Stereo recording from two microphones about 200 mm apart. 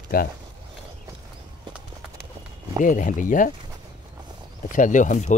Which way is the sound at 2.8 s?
40° left (ahead or behind).